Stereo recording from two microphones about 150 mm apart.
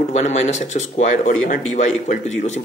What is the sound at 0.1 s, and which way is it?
Speech, 50° left (ahead or behind).